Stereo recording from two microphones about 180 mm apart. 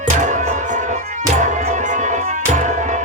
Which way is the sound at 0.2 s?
45° right (ahead or behind).